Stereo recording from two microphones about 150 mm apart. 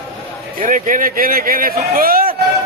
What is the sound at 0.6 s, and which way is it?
Speech, 60° right (ahead or behind).